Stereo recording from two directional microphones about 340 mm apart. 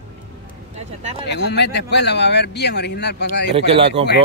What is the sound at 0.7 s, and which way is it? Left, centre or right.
Speech, centre.